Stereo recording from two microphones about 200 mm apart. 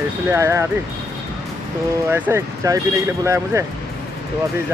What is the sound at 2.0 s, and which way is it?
Speech, 10° right (ahead or behind).